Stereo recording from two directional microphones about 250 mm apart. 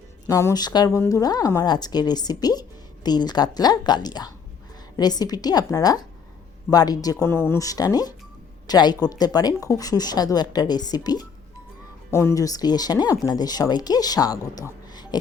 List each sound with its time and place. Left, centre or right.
0.3 s speech: centre